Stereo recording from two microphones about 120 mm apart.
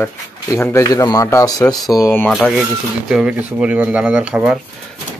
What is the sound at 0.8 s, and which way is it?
Speech, 30° left (ahead or behind).